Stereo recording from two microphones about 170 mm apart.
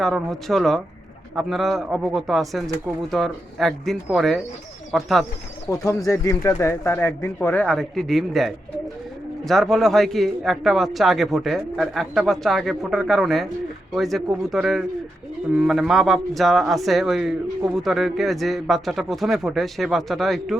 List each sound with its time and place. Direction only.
0.0 s a man's voice: centre (ahead or behind)
5.8 s a man's voice: 15° left (ahead or behind); by 20.6 s centre (ahead or behind)